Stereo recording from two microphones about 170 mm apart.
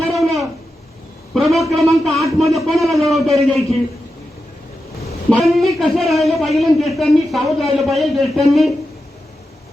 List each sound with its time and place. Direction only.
0.0 s a sound: centre (ahead or behind)
1.7 s a man's voice: centre (ahead or behind)
5.3 s a man's voice: centre (ahead or behind)